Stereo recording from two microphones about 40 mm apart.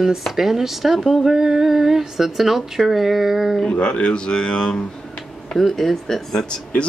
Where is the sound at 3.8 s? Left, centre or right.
Left.